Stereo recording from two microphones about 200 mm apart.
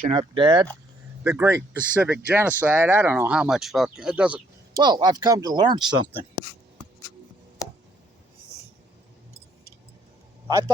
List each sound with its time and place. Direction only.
0.1 s speech: 25° right (ahead or behind)
1.2 s speech: 10° right (ahead or behind)
4.8 s speech: 20° right (ahead or behind)